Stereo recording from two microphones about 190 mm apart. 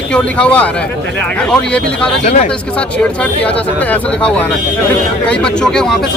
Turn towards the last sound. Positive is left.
turn(degrees=5)  # may be behind; listen again after turning